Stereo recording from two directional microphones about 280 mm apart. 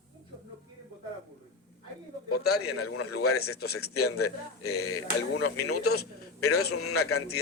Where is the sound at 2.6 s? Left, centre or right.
Left.